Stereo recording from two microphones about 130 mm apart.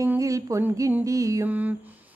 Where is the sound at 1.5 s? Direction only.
10° right (ahead or behind).